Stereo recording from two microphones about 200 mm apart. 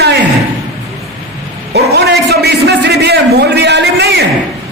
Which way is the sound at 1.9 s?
55° right (ahead or behind).